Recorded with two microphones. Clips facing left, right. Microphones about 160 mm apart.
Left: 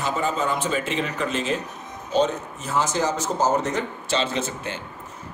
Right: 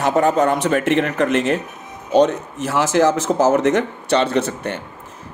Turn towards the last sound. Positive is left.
turn(degrees=-65)  # may be behind; listen again after turning